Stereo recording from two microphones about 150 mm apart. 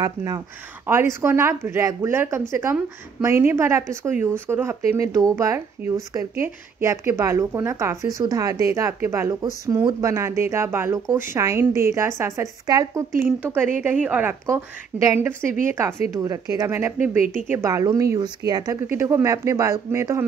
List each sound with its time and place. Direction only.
0.0 s a woman's voice: 25° right (ahead or behind)
14.4 s a woman's voice: 20° right (ahead or behind)